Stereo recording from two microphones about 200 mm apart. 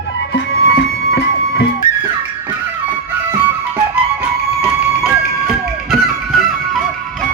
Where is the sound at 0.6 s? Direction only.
55° left (ahead or behind).